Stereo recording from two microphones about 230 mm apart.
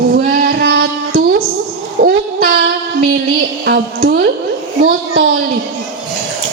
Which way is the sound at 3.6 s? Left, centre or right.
Right.